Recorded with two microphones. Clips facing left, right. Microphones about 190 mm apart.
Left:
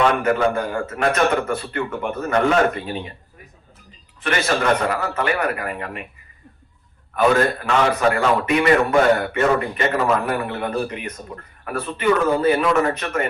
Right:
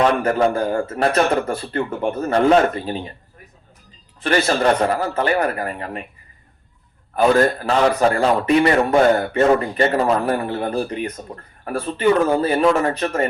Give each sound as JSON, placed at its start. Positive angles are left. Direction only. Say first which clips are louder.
{"t": 0.0, "sound": "a man's voice", "louder": "right 1 dB", "side_deg": -35}
{"t": 4.2, "sound": "a man's voice", "louder": "right 3 dB", "side_deg": -35}
{"t": 7.2, "sound": "a man's voice", "louder": "right 2 dB", "side_deg": -35}